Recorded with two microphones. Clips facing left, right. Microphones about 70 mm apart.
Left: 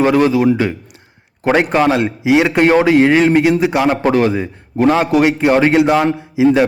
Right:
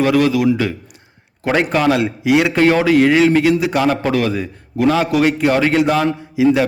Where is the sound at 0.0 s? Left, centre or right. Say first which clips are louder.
Left 2 dB; left.